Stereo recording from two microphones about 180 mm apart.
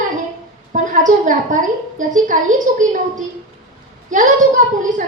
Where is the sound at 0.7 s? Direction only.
45° right (ahead or behind).